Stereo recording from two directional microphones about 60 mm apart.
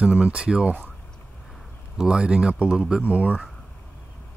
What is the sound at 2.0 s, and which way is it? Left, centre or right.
Speech, centre.